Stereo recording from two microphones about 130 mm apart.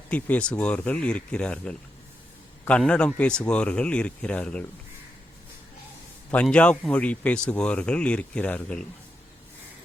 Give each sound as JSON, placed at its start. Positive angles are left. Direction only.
{"t": 0.1, "sound": "speech", "side_deg": 10}
{"t": 6.3, "sound": "speech", "side_deg": 10}